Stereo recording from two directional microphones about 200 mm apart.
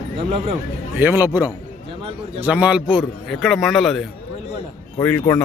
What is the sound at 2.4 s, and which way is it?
A man's voice, 5° right (ahead or behind).